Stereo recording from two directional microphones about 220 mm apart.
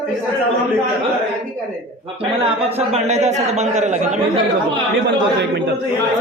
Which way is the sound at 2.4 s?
25° right (ahead or behind).